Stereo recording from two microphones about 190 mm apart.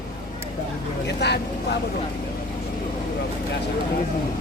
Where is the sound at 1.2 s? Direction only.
60° left (ahead or behind).